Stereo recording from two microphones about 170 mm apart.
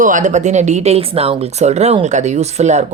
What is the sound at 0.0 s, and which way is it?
Speech, 50° right (ahead or behind).